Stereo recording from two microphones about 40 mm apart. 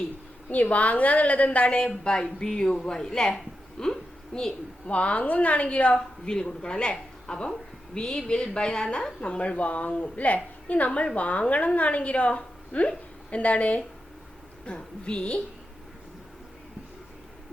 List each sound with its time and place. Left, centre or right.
0.5 s a woman's voice: left
1.6 s a woman's voice: left
4.9 s a woman's voice: left
6.3 s a woman's voice: left